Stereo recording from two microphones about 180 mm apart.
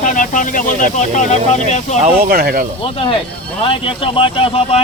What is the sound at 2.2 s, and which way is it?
Speech, 55° right (ahead or behind).